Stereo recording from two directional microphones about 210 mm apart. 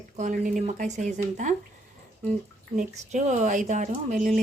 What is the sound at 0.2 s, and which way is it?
Speech, 40° right (ahead or behind).